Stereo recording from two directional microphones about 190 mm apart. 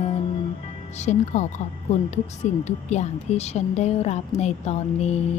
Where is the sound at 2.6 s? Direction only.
35° left (ahead or behind).